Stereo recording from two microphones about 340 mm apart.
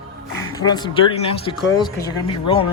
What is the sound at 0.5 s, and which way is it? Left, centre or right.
A man's voice, centre.